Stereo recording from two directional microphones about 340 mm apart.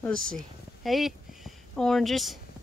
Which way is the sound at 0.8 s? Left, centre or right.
Centre.